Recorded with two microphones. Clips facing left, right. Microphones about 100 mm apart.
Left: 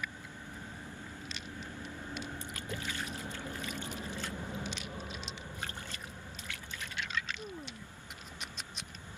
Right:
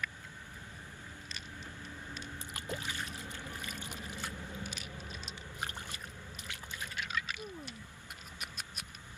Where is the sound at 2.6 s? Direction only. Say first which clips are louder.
Right 1 dB; 20° right (ahead or behind).